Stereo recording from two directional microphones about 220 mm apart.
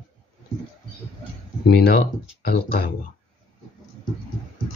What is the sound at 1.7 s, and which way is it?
Speech, 45° left (ahead or behind).